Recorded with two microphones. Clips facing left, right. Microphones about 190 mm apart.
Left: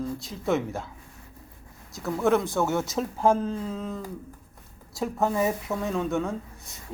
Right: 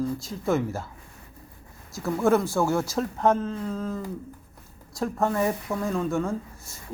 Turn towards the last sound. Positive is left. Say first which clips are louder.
# right 1 dB
turn(degrees=0)  # may be behind; listen again after turning